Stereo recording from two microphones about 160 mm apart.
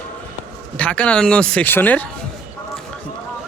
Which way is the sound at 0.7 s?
10° left (ahead or behind).